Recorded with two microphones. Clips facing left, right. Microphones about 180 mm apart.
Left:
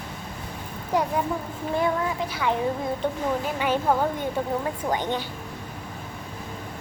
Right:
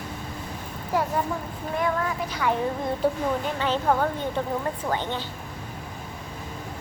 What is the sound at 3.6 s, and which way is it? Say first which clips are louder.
Speech: left 1 dB; 10° left (ahead or behind).